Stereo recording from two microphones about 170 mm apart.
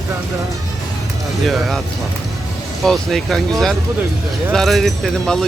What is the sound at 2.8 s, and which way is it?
Speech, centre (ahead or behind).